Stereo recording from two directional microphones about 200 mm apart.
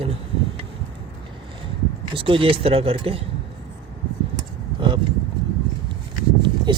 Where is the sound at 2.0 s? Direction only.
25° right (ahead or behind).